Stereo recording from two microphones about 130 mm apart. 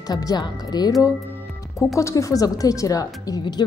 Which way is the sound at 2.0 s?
25° left (ahead or behind).